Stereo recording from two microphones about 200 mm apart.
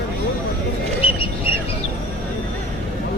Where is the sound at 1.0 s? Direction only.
25° left (ahead or behind).